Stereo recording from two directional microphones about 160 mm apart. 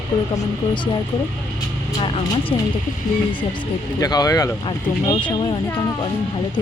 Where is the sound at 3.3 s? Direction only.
30° left (ahead or behind).